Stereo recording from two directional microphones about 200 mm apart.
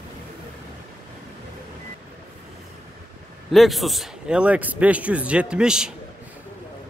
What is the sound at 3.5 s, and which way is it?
A man's voice, centre (ahead or behind).